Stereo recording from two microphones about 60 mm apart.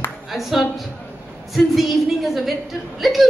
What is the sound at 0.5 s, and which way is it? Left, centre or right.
A man's voice, centre.